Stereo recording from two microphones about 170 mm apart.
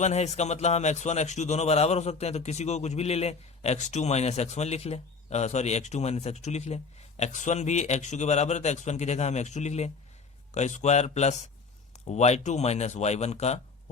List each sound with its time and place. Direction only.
0.0 s a man's voice: 40° left (ahead or behind)